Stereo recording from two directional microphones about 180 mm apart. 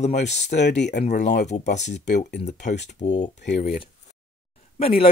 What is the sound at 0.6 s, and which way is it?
Speech, 70° left (ahead or behind).